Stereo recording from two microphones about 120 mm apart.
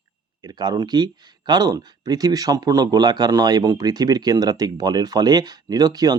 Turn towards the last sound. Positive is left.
turn(degrees=-30)  # may be behind; listen again after turning